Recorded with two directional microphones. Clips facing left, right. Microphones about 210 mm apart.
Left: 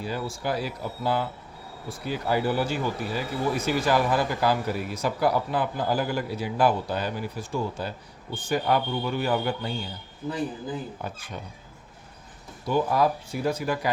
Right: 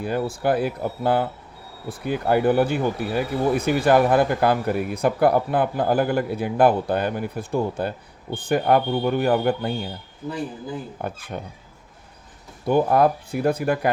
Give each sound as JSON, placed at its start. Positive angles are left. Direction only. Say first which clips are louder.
{"t": 0.0, "sound": "speech", "louder": "right 7 dB", "side_deg": -55}
{"t": 11.0, "sound": "speech", "louder": "right 5 dB", "side_deg": -55}
{"t": 12.6, "sound": "speech", "louder": "right 5 dB", "side_deg": -55}